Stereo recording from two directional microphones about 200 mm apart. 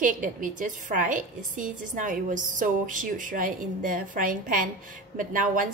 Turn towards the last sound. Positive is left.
turn(degrees=-40)  # may be behind; listen again after turning